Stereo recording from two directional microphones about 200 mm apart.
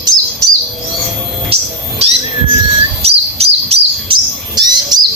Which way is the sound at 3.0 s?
30° right (ahead or behind).